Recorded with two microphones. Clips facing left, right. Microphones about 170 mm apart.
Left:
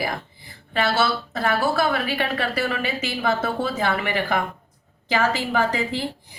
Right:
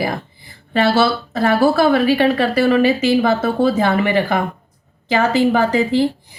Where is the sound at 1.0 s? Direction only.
35° right (ahead or behind).